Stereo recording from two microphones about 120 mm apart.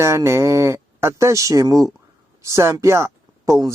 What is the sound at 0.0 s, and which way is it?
Speech, 25° right (ahead or behind).